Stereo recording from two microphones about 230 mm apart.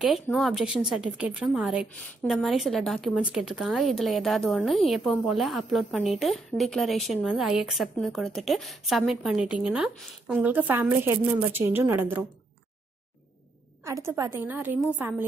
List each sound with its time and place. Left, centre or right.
0.0 s a woman's voice: centre
13.8 s a woman's voice: centre